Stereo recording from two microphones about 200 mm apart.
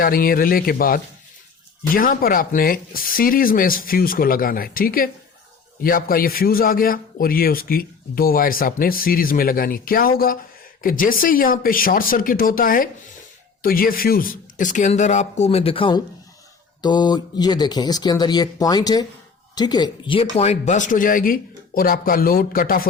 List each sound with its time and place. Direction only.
0.0 s a man's voice: 45° left (ahead or behind)